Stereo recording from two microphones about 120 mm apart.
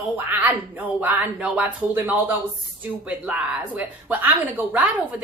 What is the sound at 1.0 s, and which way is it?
A woman's voice, 10° right (ahead or behind).